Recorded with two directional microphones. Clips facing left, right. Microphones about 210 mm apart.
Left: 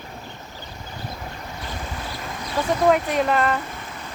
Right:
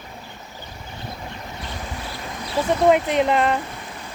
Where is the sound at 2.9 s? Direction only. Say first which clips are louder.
Right 2 dB; 20° right (ahead or behind).